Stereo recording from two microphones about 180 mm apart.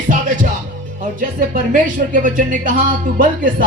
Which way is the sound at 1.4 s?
50° right (ahead or behind).